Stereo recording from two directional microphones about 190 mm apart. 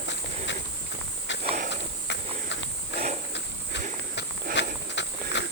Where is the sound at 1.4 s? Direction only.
35° right (ahead or behind).